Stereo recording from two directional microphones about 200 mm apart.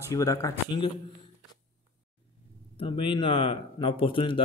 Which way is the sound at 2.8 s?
25° left (ahead or behind).